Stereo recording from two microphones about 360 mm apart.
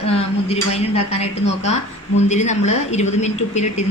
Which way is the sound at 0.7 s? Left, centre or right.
Centre.